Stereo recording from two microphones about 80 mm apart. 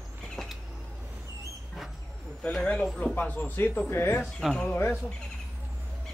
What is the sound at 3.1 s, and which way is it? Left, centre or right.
Speech, left.